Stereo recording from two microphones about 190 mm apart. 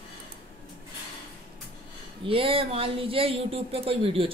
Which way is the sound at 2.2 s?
30° right (ahead or behind).